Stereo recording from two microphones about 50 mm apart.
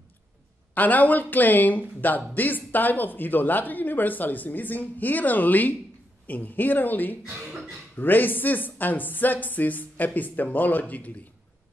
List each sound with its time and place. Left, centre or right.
0.7 s speech: left